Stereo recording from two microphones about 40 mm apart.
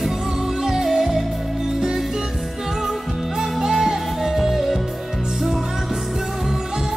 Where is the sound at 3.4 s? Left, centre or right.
Centre.